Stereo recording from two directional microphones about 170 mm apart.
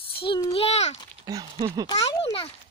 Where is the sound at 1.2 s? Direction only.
20° right (ahead or behind).